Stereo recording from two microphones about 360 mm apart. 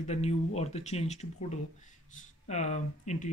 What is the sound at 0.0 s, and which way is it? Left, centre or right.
Speech, centre.